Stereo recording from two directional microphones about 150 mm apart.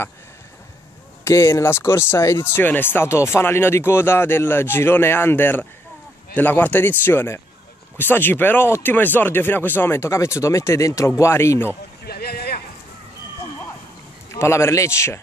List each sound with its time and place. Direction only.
1.2 s speech: 20° left (ahead or behind)
12.0 s a sound: 90° left
14.3 s a man's voice: 20° left (ahead or behind)